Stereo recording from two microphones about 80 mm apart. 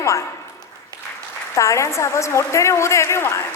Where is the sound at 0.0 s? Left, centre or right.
Left.